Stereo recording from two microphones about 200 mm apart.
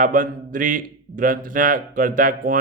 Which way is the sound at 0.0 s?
40° right (ahead or behind).